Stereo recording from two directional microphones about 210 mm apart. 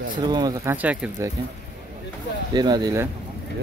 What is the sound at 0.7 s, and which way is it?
Speech, 5° right (ahead or behind).